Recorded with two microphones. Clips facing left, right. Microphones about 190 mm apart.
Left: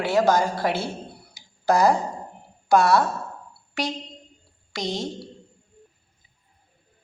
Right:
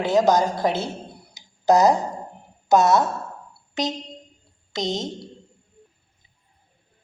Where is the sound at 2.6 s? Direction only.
20° right (ahead or behind).